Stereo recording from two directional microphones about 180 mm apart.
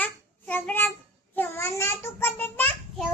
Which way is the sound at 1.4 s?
15° left (ahead or behind).